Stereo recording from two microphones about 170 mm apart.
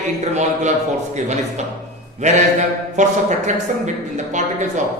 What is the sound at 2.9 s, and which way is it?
A man's voice, 45° right (ahead or behind).